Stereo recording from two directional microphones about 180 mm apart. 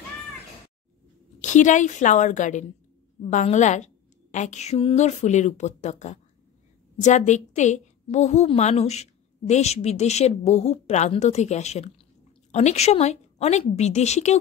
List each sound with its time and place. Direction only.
1.4 s a woman's voice: 45° left (ahead or behind)